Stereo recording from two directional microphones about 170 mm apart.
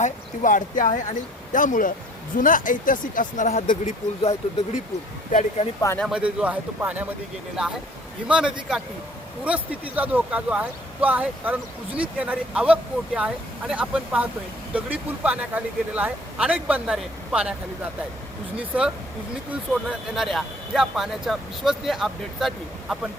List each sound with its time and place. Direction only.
0.0 s speech: 50° left (ahead or behind)
6.0 s speech: 5° right (ahead or behind)
8.3 s speech: 5° right (ahead or behind)
18.5 s speech: 5° right (ahead or behind)
19.9 s speech: centre (ahead or behind)